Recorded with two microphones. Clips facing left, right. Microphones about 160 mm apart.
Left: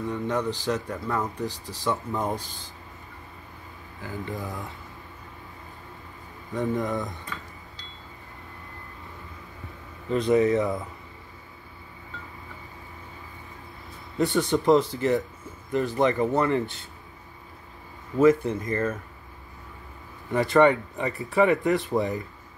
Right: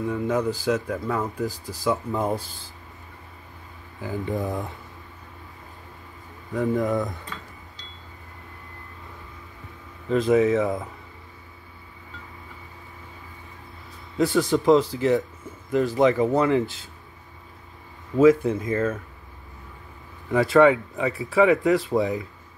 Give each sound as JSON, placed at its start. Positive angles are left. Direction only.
{"t": 0.0, "sound": "speech", "side_deg": -5}
{"t": 4.0, "sound": "speech", "side_deg": -20}
{"t": 6.5, "sound": "speech", "side_deg": 0}
{"t": 10.0, "sound": "speech", "side_deg": 0}
{"t": 14.1, "sound": "speech", "side_deg": 0}
{"t": 18.2, "sound": "speech", "side_deg": -5}
{"t": 20.5, "sound": "speech", "side_deg": 0}